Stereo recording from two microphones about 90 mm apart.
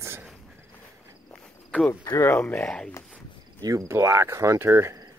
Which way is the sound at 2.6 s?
10° left (ahead or behind).